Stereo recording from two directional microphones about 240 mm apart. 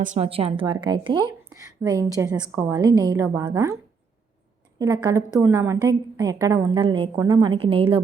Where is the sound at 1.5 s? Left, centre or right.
Centre.